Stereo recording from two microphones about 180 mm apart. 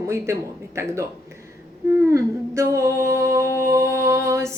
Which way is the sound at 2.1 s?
15° right (ahead or behind).